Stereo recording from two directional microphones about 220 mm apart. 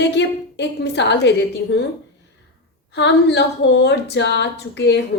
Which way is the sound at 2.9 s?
50° left (ahead or behind).